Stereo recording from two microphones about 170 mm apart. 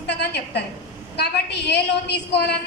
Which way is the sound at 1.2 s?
80° left.